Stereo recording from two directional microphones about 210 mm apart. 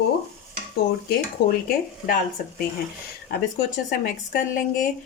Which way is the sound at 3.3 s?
45° left (ahead or behind).